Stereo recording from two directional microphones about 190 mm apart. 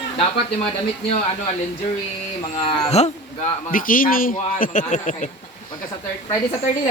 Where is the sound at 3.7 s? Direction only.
45° left (ahead or behind).